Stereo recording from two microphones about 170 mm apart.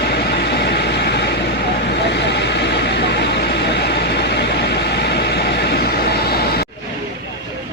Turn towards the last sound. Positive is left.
turn(degrees=65)  # may be behind; listen again after turning